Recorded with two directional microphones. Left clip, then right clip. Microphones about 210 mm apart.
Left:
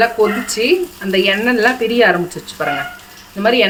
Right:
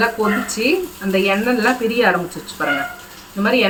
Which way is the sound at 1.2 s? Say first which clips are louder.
Left 3 dB; 55° left (ahead or behind).